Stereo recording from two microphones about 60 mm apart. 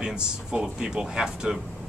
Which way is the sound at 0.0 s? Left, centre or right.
Centre.